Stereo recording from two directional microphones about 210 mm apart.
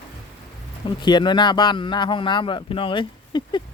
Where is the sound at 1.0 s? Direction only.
20° left (ahead or behind).